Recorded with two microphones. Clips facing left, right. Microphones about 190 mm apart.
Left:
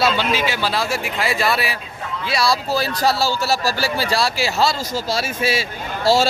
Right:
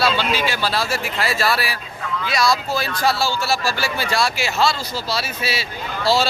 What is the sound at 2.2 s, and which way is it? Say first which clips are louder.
Speech: even; 30° left (ahead or behind).